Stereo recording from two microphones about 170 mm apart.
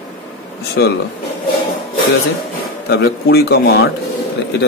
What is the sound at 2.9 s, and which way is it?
Speech, 70° left (ahead or behind).